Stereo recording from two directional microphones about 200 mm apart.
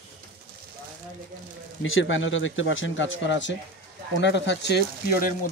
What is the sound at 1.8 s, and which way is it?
Speech, 75° left (ahead or behind).